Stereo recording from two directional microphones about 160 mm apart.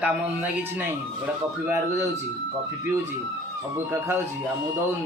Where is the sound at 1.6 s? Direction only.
15° right (ahead or behind).